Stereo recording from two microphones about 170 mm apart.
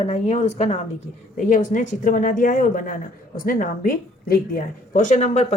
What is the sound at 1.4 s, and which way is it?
A woman's voice, 50° left (ahead or behind).